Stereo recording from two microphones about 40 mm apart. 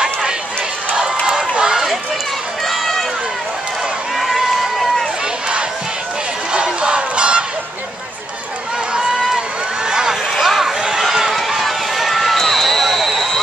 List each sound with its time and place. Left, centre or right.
1.6 s run: centre
2.6 s run: centre
6.5 s crowd: right
9.8 s a sound: centre
10.4 s a sound: centre
11.0 s run: centre